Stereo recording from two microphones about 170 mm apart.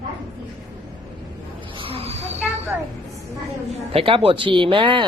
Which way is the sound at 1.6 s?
30° right (ahead or behind).